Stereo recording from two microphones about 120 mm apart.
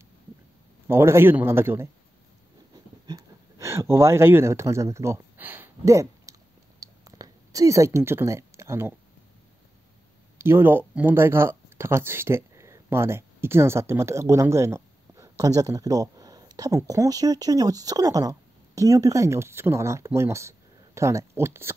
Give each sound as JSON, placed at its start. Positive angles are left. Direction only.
{"t": 0.8, "sound": "a man's voice", "side_deg": -20}
{"t": 3.1, "sound": "speech", "side_deg": -30}
{"t": 6.8, "sound": "a sound", "side_deg": -30}
{"t": 10.3, "sound": "speech", "side_deg": -20}